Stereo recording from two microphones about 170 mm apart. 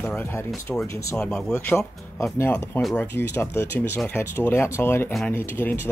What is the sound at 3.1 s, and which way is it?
Speech, 15° left (ahead or behind).